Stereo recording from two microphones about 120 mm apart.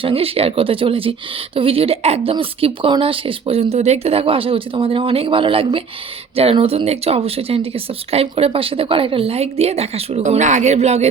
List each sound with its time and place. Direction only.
0.0 s speech: 50° right (ahead or behind)
2.3 s speech: 50° right (ahead or behind); by 11.1 s 65° right (ahead or behind)